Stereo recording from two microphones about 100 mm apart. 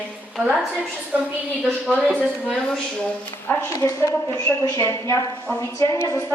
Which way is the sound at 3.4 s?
25° left (ahead or behind).